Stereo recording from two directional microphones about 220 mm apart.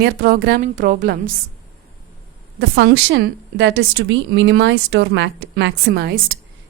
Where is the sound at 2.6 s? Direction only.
50° right (ahead or behind).